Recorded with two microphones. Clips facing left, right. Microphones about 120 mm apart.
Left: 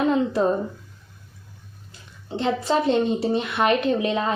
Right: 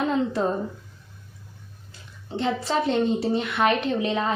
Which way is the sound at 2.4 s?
20° left (ahead or behind).